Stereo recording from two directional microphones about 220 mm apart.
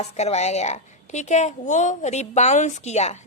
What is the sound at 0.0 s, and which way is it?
A woman's voice, 30° left (ahead or behind).